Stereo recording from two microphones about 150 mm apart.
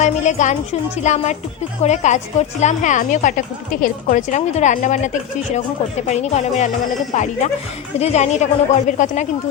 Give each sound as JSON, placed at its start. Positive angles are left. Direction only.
{"t": 0.0, "sound": "a woman's voice", "side_deg": 55}